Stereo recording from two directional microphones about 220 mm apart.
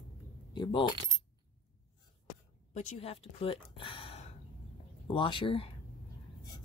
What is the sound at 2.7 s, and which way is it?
Speech, 30° left (ahead or behind).